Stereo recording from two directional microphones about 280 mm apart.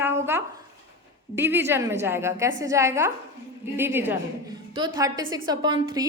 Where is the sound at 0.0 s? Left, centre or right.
Centre.